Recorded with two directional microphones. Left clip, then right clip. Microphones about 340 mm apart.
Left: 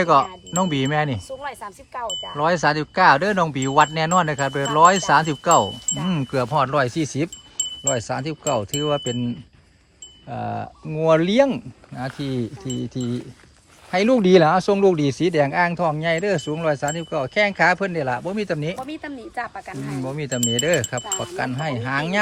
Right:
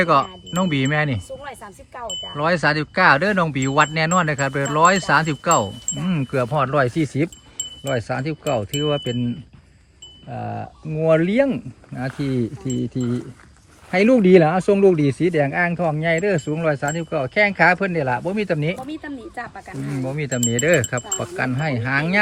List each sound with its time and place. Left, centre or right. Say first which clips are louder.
0.0 s speech: even; centre
1.4 s speech: left 3 dB; centre
2.3 s speech: even; centre
10.3 s speech: left 2 dB; centre
12.4 s speech: right 3 dB; left
12.9 s speech: right 3 dB; centre
18.8 s speech: even; centre